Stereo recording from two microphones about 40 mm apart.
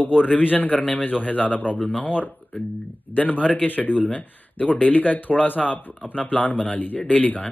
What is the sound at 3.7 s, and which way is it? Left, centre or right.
Speech, left.